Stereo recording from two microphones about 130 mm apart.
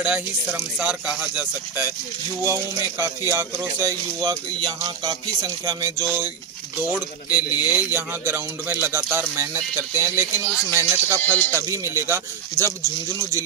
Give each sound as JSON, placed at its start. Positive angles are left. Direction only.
{"t": 0.0, "sound": "speech", "side_deg": -10}
{"t": 2.4, "sound": "music", "side_deg": -20}
{"t": 4.3, "sound": "music", "side_deg": -35}
{"t": 7.2, "sound": "speech", "side_deg": 30}
{"t": 7.7, "sound": "speech", "side_deg": -15}
{"t": 10.7, "sound": "music", "side_deg": -20}
{"t": 11.1, "sound": "music", "side_deg": 15}
{"t": 11.5, "sound": "music", "side_deg": -20}